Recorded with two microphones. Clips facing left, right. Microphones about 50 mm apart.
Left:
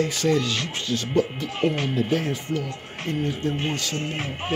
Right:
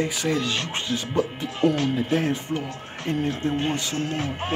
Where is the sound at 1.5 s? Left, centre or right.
Left.